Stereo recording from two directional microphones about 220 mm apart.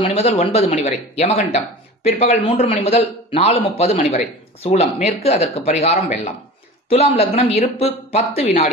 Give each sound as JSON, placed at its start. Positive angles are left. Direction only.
{"t": 0.0, "sound": "a man's voice", "side_deg": 25}